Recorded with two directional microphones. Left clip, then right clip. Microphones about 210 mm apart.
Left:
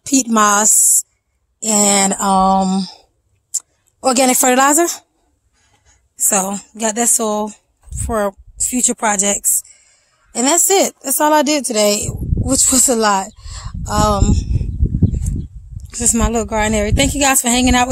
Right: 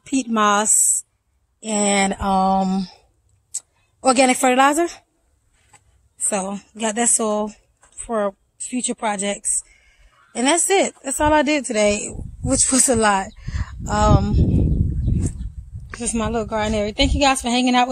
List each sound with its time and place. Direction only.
0.0 s a woman's voice: 35° left (ahead or behind)
6.1 s speech: 35° left (ahead or behind); by 14.5 s 20° left (ahead or behind)
16.0 s a woman's voice: 30° left (ahead or behind)